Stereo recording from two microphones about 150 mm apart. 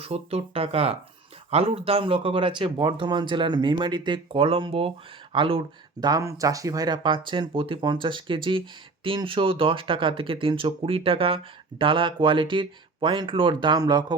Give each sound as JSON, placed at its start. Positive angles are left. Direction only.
{"t": 0.0, "sound": "speech", "side_deg": -40}
{"t": 6.1, "sound": "speech", "side_deg": -20}